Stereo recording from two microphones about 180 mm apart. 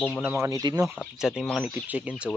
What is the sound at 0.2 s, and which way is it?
Speech, 15° right (ahead or behind).